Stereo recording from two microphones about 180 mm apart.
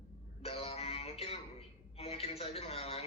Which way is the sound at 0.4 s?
30° left (ahead or behind).